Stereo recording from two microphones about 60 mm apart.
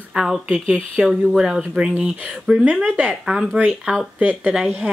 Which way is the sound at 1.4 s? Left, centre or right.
Centre.